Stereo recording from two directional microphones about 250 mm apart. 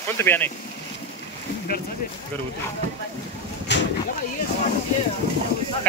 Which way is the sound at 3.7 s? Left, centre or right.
Left.